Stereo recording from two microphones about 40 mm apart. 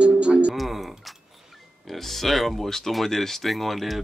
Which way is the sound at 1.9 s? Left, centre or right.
Centre.